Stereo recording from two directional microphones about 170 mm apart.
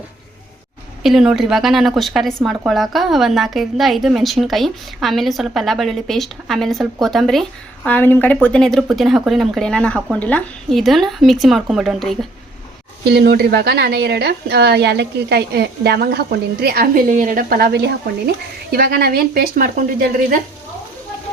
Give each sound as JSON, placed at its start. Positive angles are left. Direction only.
{"t": 1.0, "sound": "a woman's voice", "side_deg": -5}
{"t": 13.1, "sound": "a woman's voice", "side_deg": -70}
{"t": 18.7, "sound": "a woman's voice", "side_deg": -65}